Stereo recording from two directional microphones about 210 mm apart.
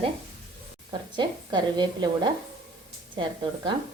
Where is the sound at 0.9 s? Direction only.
20° right (ahead or behind).